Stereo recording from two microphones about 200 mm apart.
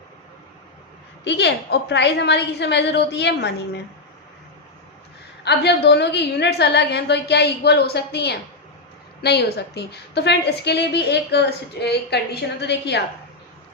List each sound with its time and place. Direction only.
1.2 s a woman's voice: 60° left (ahead or behind)
5.5 s a woman's voice: 55° left (ahead or behind)